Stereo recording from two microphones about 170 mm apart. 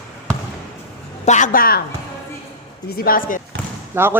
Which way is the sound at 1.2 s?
45° left (ahead or behind).